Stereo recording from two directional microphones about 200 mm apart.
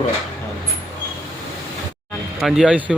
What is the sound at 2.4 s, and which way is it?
Speech, 5° right (ahead or behind).